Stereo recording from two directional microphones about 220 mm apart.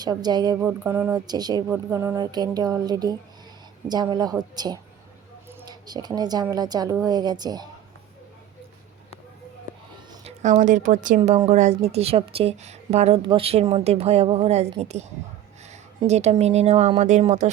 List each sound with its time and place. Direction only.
0.0 s a woman's voice: 20° right (ahead or behind)
10.1 s a woman's voice: 30° right (ahead or behind)
11.2 s a woman's voice: 25° right (ahead or behind)